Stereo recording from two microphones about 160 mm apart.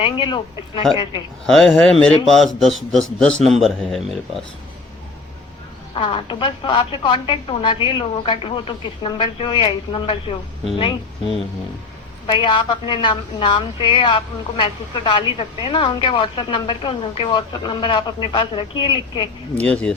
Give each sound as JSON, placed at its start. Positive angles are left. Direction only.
{"t": 0.0, "sound": "a woman's voice", "side_deg": 30}
{"t": 1.5, "sound": "a man's voice", "side_deg": 0}
{"t": 5.9, "sound": "a woman's voice", "side_deg": 30}
{"t": 19.5, "sound": "speech", "side_deg": 10}